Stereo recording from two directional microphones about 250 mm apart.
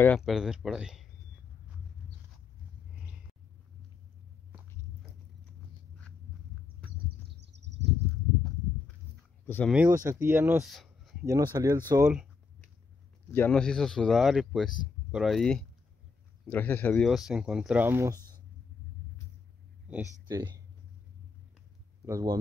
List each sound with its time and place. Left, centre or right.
0.0 s speech: centre
7.3 s a sound: right
9.5 s speech: centre
9.8 s speech: centre
11.2 s speech: centre
13.3 s speech: centre
20.2 s speech: centre
22.0 s speech: centre